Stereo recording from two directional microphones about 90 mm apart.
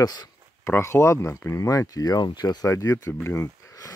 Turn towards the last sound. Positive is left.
turn(degrees=40)  # may be behind; listen again after turning